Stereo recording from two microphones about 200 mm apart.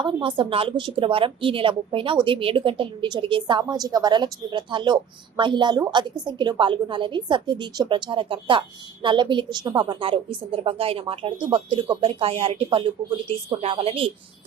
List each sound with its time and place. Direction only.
0.0 s a woman's voice: 25° right (ahead or behind)